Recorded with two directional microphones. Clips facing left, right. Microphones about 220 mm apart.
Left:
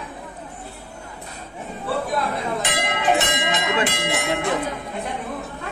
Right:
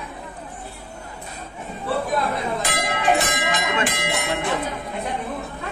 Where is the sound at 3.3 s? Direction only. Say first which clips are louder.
Left 1 dB; 25° left (ahead or behind).